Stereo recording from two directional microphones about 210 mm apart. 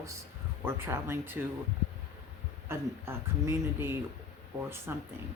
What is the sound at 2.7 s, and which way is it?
Speech, 10° right (ahead or behind).